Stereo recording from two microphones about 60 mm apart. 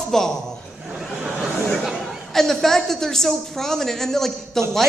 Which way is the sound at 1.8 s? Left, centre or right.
Centre.